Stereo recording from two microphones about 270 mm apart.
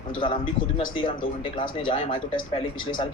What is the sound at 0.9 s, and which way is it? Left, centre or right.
Speech, centre.